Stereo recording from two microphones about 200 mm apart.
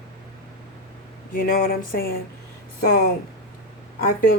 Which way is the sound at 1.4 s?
45° left (ahead or behind).